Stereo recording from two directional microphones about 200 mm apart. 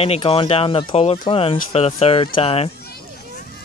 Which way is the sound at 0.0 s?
30° left (ahead or behind).